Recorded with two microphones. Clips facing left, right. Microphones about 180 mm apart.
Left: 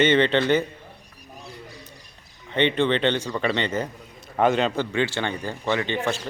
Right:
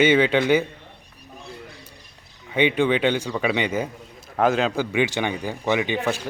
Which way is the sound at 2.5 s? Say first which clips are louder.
Right 1 dB; 10° right (ahead or behind).